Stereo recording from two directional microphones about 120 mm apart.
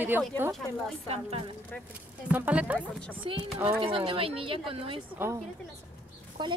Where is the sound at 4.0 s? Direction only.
45° right (ahead or behind).